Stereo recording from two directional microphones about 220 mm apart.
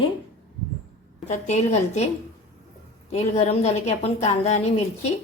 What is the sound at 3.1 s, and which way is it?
A woman's voice, 30° left (ahead or behind).